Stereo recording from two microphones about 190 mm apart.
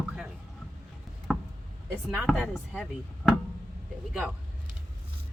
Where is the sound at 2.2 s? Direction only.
Centre (ahead or behind).